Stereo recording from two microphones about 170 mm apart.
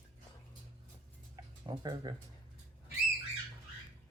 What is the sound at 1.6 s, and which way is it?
Speech, 25° right (ahead or behind).